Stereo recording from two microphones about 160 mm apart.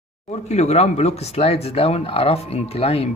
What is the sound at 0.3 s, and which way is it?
Speech, 45° left (ahead or behind).